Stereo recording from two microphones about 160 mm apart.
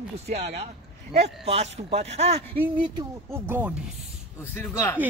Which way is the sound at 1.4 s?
40° right (ahead or behind).